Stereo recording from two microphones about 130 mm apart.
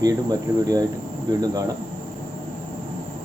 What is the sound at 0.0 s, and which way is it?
Speech, 30° right (ahead or behind).